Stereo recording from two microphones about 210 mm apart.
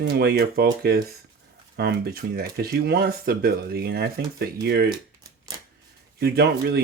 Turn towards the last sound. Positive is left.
turn(degrees=-50)  # may be behind; listen again after turning